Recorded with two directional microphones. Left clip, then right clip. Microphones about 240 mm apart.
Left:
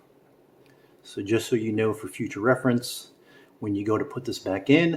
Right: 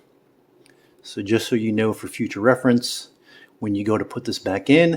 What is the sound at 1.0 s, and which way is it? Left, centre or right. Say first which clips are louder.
Speech: right 4 dB; right.